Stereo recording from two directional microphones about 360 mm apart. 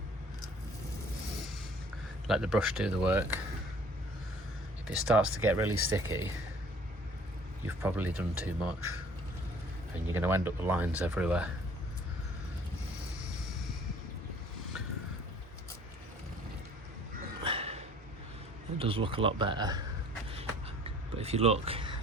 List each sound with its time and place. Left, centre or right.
2.2 s speech: centre
4.9 s speech: centre
7.8 s speech: centre
10.1 s speech: centre
17.4 s a sound: centre
18.8 s speech: centre
20.3 s a sound: centre